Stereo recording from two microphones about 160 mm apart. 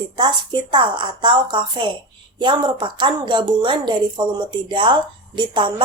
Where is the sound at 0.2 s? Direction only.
30° right (ahead or behind).